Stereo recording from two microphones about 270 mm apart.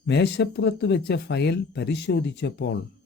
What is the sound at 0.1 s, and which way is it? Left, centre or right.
Speech, left.